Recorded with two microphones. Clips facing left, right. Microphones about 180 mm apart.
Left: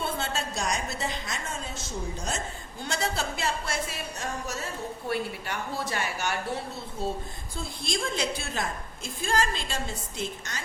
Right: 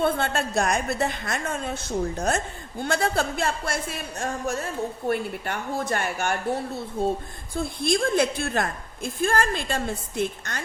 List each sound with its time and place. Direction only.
0.0 s a woman's voice: 55° right (ahead or behind)
7.5 s a woman's voice: 55° right (ahead or behind)